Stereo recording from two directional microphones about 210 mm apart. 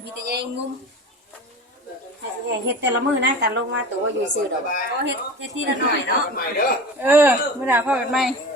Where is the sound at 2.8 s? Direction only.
55° right (ahead or behind).